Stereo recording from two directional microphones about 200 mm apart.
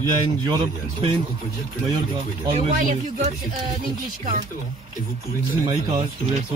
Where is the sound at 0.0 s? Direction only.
20° right (ahead or behind).